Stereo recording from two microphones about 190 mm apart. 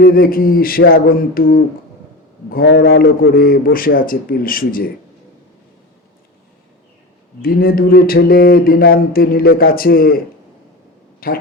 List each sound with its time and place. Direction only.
0.0 s speech: 50° left (ahead or behind)
2.6 s a man's voice: 85° left
3.3 s speech: 50° left (ahead or behind)
7.4 s speech: 50° left (ahead or behind)
11.2 s speech: 50° left (ahead or behind)